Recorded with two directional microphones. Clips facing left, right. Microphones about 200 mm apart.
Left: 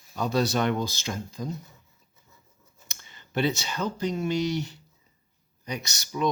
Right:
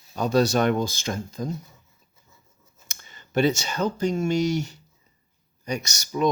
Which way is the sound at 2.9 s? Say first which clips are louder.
Right 4 dB; 45° right (ahead or behind).